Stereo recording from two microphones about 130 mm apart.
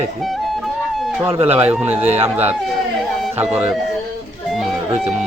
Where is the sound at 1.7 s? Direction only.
15° right (ahead or behind).